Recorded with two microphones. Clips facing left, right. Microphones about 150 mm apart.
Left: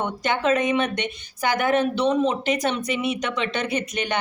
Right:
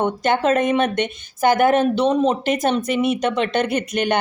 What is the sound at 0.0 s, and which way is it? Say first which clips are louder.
A woman's voice: right 5 dB; 50° right (ahead or behind).